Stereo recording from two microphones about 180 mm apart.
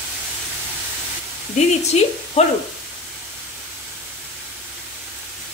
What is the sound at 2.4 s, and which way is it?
Speech, 35° left (ahead or behind).